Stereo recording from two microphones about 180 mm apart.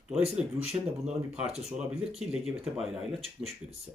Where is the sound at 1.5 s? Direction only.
5° right (ahead or behind).